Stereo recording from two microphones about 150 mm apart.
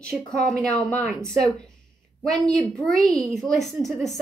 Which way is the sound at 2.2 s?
Centre (ahead or behind).